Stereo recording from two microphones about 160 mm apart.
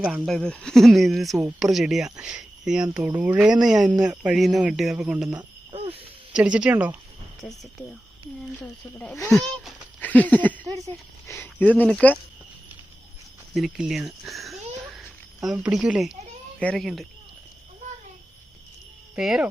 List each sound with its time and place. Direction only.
0.0 s speech: centre (ahead or behind)
5.3 s cricket: 25° right (ahead or behind)
6.3 s speech: 5° right (ahead or behind)
10.0 s a sound: 10° left (ahead or behind)
11.3 s speech: 10° left (ahead or behind)
13.5 s a sound: centre (ahead or behind)
15.5 s speech: 5° right (ahead or behind)
19.1 s speech: 5° right (ahead or behind)